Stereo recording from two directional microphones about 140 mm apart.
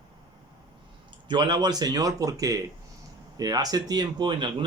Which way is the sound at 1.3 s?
30° right (ahead or behind).